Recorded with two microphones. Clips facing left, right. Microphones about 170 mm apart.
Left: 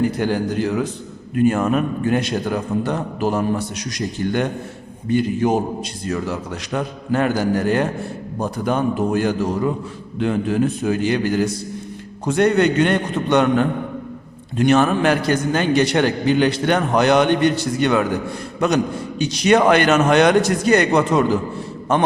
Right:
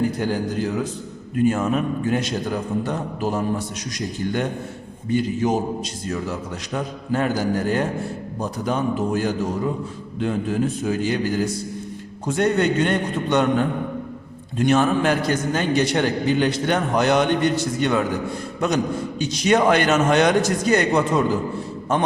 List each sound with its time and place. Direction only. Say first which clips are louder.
0.2 s a man's voice: left 3 dB; 75° left (ahead or behind)
1.4 s a man's voice: left 3 dB; 60° left (ahead or behind)
5.0 s a man's voice: left 3 dB; 60° left (ahead or behind)
6.7 s a man's voice: left 3 dB; 70° left (ahead or behind)
8.4 s a man's voice: left 3 dB; 60° left (ahead or behind)
19.2 s a man's voice: left 3 dB; 70° left (ahead or behind)